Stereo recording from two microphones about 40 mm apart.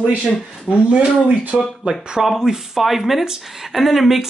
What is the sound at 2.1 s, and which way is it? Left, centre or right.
Speech, centre.